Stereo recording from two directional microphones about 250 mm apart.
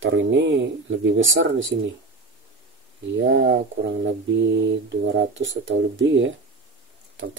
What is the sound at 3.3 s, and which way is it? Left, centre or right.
Speech, right.